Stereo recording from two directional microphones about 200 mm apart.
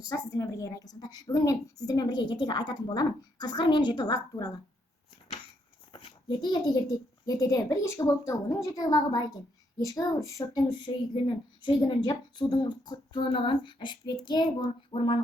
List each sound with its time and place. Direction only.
0.1 s speech: 15° left (ahead or behind)
5.9 s a sound: 25° left (ahead or behind)
7.3 s a woman's voice: 15° left (ahead or behind)